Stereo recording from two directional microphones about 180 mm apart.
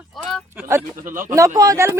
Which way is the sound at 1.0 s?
45° right (ahead or behind).